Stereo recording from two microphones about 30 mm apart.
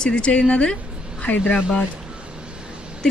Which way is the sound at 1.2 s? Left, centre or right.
Left.